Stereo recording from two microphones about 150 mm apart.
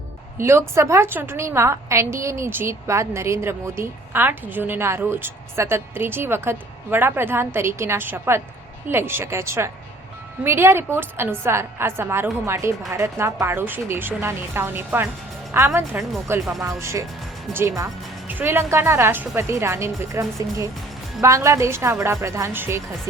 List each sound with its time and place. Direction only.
0.3 s a woman's voice: 15° right (ahead or behind)